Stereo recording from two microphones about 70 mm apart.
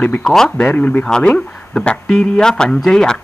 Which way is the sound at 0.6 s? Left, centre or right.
Left.